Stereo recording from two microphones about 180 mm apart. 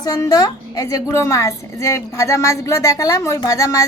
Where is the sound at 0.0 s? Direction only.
20° left (ahead or behind).